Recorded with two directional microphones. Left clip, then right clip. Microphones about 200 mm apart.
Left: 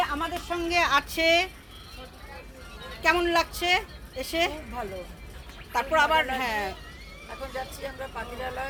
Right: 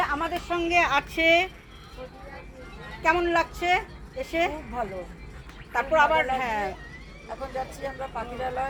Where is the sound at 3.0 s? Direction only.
15° left (ahead or behind).